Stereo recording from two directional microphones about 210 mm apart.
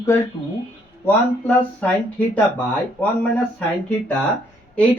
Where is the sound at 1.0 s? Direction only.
5° left (ahead or behind).